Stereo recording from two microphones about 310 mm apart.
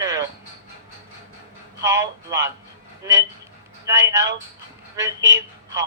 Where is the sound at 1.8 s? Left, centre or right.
Centre.